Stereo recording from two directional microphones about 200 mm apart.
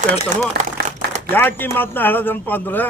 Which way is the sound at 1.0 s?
55° right (ahead or behind).